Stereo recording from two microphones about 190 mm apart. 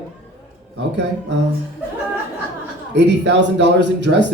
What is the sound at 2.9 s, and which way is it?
Speech, 65° right (ahead or behind).